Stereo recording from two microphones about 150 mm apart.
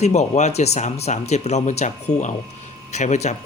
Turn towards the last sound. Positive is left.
turn(degrees=50)  # may be behind; listen again after turning